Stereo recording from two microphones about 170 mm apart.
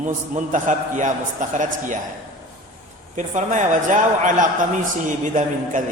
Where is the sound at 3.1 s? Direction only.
45° right (ahead or behind).